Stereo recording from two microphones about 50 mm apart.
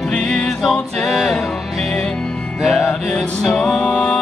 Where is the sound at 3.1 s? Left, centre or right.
Centre.